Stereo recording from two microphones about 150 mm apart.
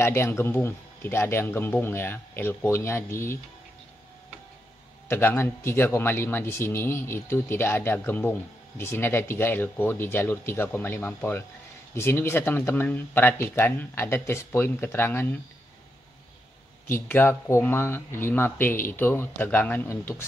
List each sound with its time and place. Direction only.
0.0 s speech: 15° left (ahead or behind)
5.1 s speech: 15° left (ahead or behind)
16.8 s speech: 15° left (ahead or behind)